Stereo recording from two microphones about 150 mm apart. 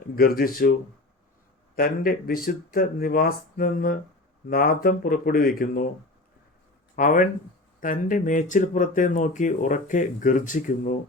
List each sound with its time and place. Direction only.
0.2 s speech: 80° left
1.7 s speech: 75° left (ahead or behind)
6.9 s speech: 60° left (ahead or behind)